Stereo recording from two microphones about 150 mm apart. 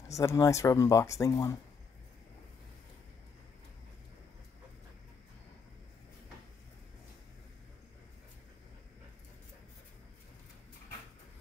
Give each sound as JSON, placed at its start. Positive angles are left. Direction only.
{"t": 0.1, "sound": "speech", "side_deg": 20}